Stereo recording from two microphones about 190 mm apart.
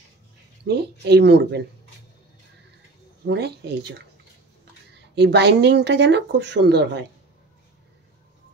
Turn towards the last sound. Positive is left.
turn(degrees=-60)  # may be behind; listen again after turning